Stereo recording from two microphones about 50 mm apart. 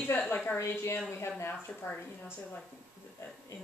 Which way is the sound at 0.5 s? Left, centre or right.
Left.